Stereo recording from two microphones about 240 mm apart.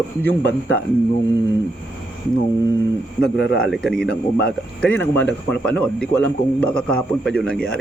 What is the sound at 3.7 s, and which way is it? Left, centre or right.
Speech, centre.